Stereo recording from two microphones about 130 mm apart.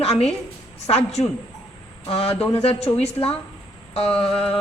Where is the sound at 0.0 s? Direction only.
50° left (ahead or behind).